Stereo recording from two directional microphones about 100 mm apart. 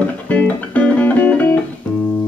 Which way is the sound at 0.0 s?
15° left (ahead or behind).